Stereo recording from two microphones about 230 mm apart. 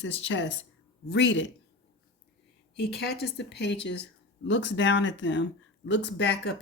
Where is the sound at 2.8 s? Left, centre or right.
Left.